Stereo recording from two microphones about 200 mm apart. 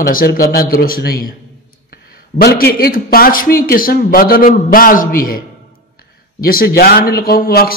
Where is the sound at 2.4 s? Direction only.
50° left (ahead or behind).